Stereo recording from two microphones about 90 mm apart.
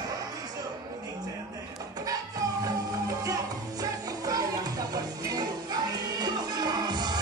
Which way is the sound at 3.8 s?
40° right (ahead or behind).